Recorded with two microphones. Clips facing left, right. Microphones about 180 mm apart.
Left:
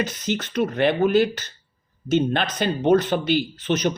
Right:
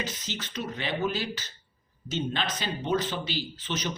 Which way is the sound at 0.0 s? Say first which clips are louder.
Left 10 dB; 60° left (ahead or behind).